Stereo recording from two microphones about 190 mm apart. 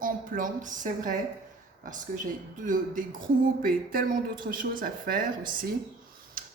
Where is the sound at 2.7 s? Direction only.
45° right (ahead or behind).